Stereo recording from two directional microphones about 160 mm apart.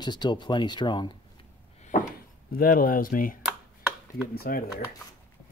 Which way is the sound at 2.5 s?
65° left (ahead or behind).